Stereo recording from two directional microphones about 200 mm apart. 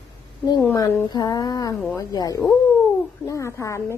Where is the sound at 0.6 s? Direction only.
15° left (ahead or behind).